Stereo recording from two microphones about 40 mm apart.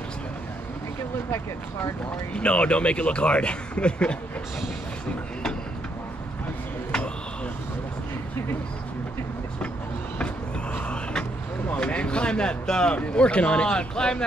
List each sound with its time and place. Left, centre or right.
2.3 s speech: left
10.1 s vehicle: left
11.8 s speech: left